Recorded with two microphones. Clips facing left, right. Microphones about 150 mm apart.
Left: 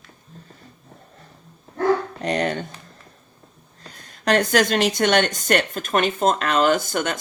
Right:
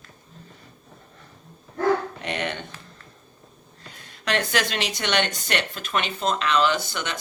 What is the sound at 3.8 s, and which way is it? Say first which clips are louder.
Speech: left 7 dB; 40° left (ahead or behind).